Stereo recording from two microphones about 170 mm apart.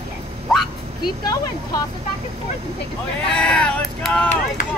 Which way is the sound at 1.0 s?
20° left (ahead or behind).